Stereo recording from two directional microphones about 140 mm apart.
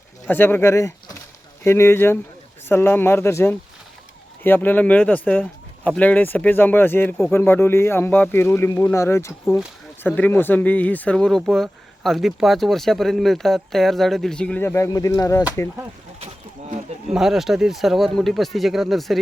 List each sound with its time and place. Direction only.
0.3 s speech: 15° left (ahead or behind)
16.2 s a sound: 45° right (ahead or behind)
17.1 s speech: centre (ahead or behind)